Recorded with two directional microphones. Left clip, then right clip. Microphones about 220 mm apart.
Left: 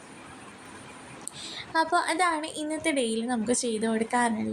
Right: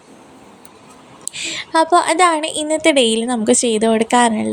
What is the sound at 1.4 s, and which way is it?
Speech, 30° right (ahead or behind).